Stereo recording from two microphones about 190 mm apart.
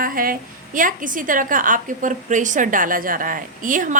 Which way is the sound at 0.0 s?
50° right (ahead or behind).